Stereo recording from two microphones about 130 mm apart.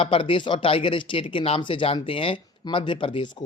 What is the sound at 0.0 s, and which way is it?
Speech, 45° left (ahead or behind).